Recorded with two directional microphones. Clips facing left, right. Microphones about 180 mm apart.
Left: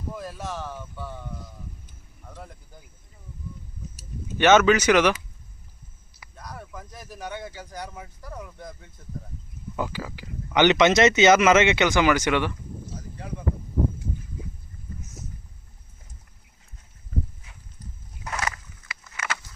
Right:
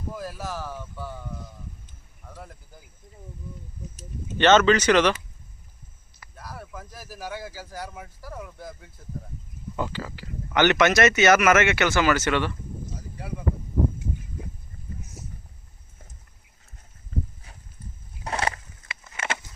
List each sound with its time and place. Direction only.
0.1 s a sound: centre (ahead or behind)
2.2 s speech: centre (ahead or behind)
3.9 s speech: 10° left (ahead or behind)
6.3 s speech: 5° right (ahead or behind)
9.7 s speech: 10° left (ahead or behind)
12.9 s speech: 10° right (ahead or behind)
18.2 s a sound: 30° right (ahead or behind)